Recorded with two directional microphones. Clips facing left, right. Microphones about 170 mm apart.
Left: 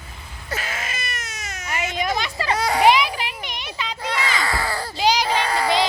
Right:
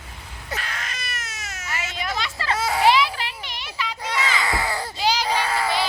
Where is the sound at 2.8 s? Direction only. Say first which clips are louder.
Left 2 dB; 15° left (ahead or behind).